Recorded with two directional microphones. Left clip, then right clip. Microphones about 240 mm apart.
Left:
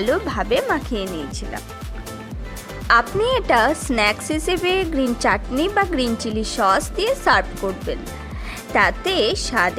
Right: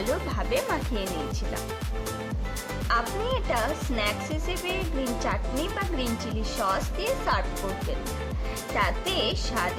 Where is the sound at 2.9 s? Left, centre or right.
Left.